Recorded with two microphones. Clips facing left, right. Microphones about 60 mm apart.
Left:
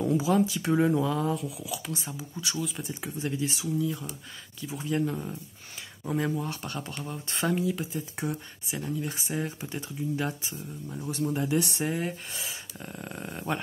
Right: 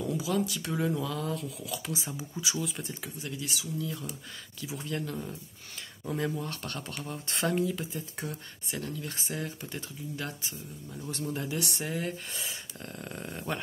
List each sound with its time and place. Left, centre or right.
0.0 s speech: left; by 3.0 s centre
3.0 s speech: left
3.7 s speech: centre
4.9 s speech: centre
12.3 s speech: centre